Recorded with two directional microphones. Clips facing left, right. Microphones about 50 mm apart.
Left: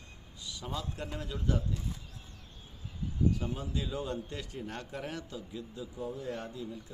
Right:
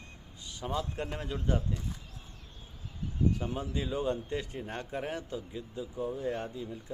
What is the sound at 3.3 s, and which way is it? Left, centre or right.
Speech, right.